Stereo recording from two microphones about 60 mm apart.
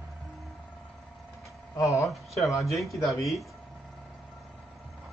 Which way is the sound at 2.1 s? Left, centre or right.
Centre.